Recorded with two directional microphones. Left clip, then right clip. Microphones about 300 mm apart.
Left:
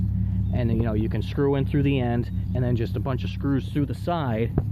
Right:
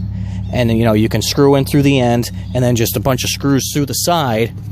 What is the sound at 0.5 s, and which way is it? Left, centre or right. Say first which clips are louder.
Speech: right 13 dB; right.